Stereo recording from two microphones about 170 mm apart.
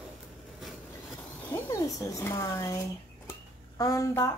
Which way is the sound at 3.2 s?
20° left (ahead or behind).